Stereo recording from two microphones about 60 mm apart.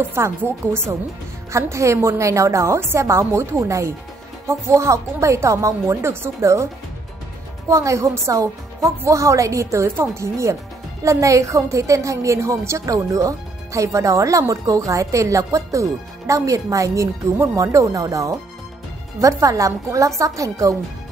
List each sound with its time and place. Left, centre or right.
0.1 s speech: right
1.7 s a woman's voice: right
5.9 s a woman's voice: right
7.7 s speech: right